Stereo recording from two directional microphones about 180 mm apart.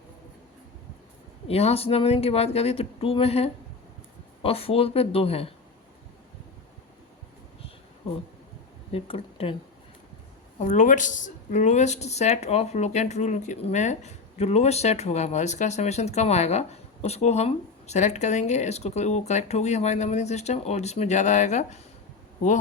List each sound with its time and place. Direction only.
1.5 s speech: 35° left (ahead or behind)
8.9 s speech: 30° left (ahead or behind)
10.6 s speech: 40° left (ahead or behind)